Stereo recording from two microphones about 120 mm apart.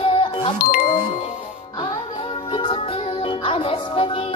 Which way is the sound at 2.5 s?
45° left (ahead or behind).